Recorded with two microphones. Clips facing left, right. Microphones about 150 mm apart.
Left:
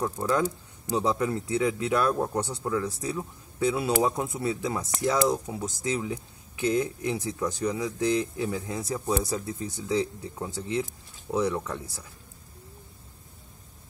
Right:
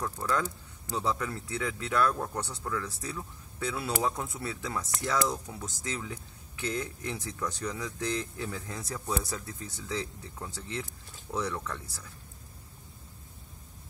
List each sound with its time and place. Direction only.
0.0 s speech: 20° left (ahead or behind)